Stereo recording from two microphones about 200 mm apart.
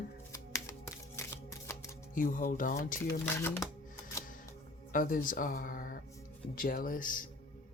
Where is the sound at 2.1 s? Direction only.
40° left (ahead or behind).